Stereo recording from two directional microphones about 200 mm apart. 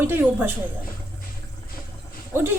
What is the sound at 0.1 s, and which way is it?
Speech, 10° right (ahead or behind).